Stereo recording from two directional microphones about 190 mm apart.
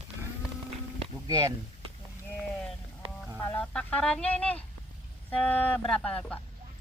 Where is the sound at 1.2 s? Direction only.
20° right (ahead or behind).